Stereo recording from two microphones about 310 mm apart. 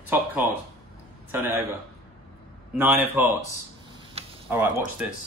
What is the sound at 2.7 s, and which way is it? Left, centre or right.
Speech, centre.